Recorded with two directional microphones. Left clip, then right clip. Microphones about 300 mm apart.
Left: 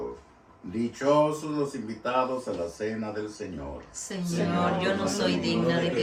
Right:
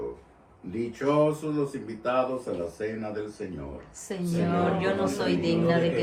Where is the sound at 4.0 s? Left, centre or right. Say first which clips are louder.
Right 1 dB; right.